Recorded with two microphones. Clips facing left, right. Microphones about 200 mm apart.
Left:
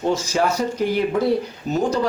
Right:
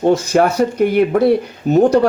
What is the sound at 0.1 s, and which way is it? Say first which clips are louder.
A man's voice: right 6 dB; 60° right (ahead or behind).